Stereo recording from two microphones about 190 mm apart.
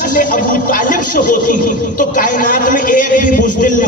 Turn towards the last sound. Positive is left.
turn(degrees=45)  # may be behind; listen again after turning